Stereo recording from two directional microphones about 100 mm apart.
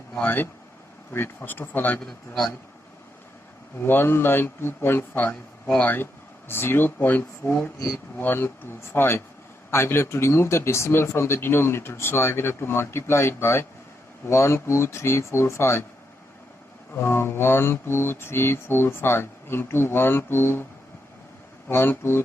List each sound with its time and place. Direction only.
0.1 s speech: 15° left (ahead or behind)
2.0 s a man's voice: 5° left (ahead or behind)
3.8 s speech: 20° left (ahead or behind)
16.9 s speech: 25° left (ahead or behind)
21.7 s speech: 25° left (ahead or behind)